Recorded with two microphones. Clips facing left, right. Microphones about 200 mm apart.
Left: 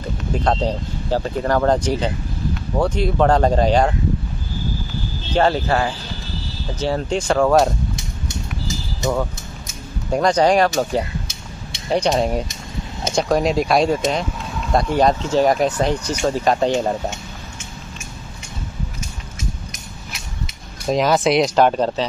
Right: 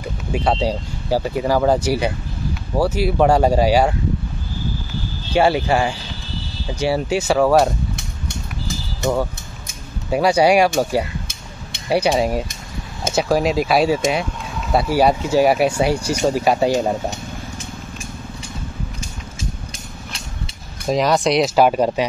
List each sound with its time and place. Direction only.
0.0 s speech: 10° right (ahead or behind)
5.3 s speech: 10° right (ahead or behind)
7.9 s vehicle: 60° right (ahead or behind)
10.1 s speech: 10° right (ahead or behind)
20.8 s speech: centre (ahead or behind)